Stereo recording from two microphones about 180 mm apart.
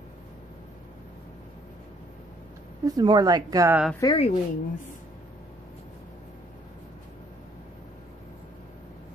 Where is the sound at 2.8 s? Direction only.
20° right (ahead or behind).